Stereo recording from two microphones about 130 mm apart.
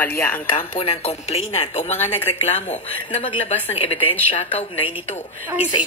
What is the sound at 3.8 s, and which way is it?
Speech, 50° left (ahead or behind).